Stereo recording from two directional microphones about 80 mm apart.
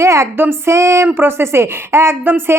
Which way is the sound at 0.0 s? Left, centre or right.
Right.